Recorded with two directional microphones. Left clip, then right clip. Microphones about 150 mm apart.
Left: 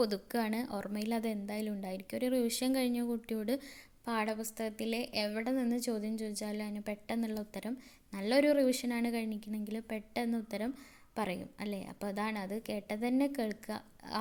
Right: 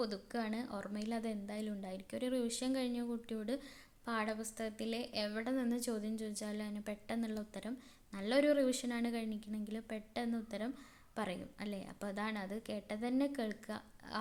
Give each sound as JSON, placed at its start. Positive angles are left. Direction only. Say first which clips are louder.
{"t": 0.0, "sound": "a woman's voice", "louder": "left 7 dB", "side_deg": 50}